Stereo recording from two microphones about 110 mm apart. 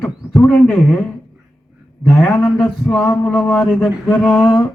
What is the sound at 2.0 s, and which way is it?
A man's voice, 5° left (ahead or behind).